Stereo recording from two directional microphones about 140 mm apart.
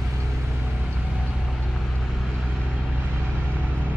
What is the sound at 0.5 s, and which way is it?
Vehicle, 5° right (ahead or behind).